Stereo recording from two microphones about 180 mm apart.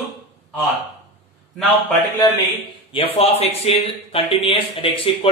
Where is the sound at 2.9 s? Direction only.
30° left (ahead or behind).